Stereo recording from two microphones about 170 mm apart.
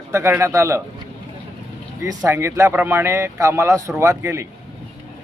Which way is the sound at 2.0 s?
20° right (ahead or behind).